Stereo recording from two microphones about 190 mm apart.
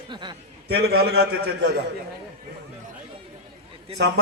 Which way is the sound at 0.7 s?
55° right (ahead or behind).